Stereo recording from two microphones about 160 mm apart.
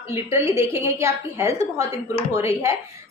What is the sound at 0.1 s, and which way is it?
A woman's voice, 15° right (ahead or behind).